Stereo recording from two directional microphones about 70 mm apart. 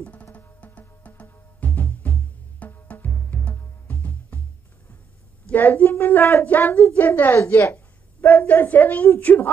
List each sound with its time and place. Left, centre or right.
0.0 s music: centre
5.5 s a woman's voice: left